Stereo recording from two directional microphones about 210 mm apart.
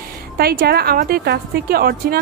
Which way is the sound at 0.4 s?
45° right (ahead or behind).